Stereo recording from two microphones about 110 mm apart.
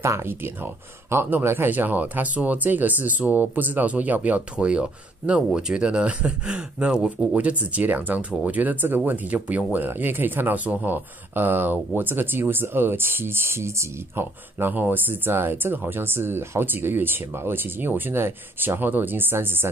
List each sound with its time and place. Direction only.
0.0 s speech: 25° right (ahead or behind)